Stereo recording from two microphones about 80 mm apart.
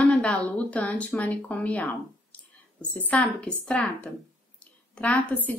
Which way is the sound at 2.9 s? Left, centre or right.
Left.